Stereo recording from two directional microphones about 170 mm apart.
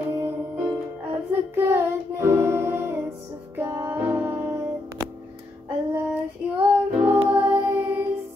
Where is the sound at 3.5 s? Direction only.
15° right (ahead or behind).